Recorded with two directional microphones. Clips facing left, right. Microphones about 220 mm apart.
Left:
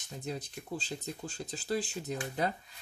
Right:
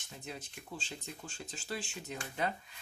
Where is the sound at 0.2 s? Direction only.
35° left (ahead or behind).